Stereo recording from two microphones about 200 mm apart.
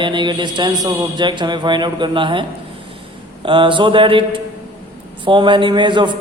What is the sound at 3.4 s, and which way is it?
Mantra, 25° right (ahead or behind).